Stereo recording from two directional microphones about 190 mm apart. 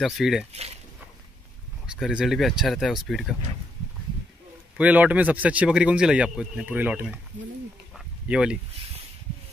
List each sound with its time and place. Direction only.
0.0 s speech: centre (ahead or behind)
0.5 s speech: 35° right (ahead or behind)
1.9 s speech: 5° right (ahead or behind)
4.7 s speech: 10° right (ahead or behind)
8.3 s speech: 5° right (ahead or behind)